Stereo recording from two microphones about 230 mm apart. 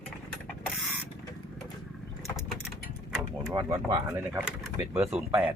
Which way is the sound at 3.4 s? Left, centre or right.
Centre.